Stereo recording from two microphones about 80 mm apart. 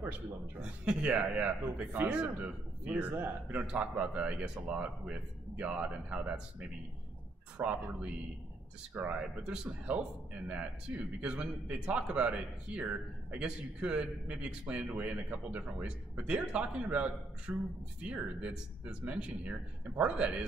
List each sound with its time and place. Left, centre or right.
0.6 s speech: centre
7.5 s speech: centre